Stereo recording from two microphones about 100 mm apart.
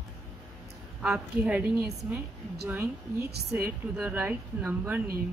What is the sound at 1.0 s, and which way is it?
A woman's voice, 10° right (ahead or behind).